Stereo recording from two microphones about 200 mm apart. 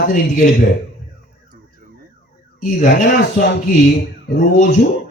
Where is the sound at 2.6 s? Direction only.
45° left (ahead or behind).